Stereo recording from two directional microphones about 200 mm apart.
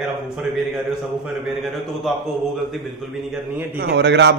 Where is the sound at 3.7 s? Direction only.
60° right (ahead or behind).